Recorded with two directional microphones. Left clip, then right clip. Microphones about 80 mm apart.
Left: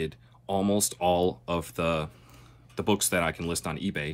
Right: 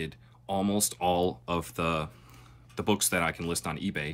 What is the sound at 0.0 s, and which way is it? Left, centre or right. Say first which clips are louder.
Speech: left 4 dB; left.